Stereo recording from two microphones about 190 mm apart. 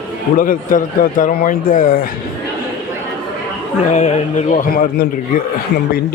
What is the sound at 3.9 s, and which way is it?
A man's voice, 35° left (ahead or behind).